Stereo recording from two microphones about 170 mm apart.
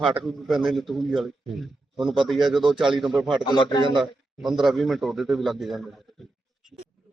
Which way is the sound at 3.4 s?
25° left (ahead or behind).